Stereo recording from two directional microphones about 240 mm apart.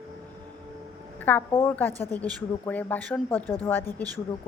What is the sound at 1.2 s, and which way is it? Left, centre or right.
A woman's voice, centre.